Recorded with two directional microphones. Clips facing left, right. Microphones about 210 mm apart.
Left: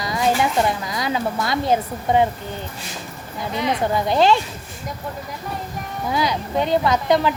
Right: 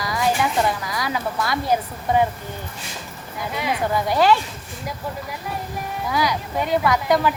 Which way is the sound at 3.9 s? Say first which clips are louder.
Even; 25° left (ahead or behind).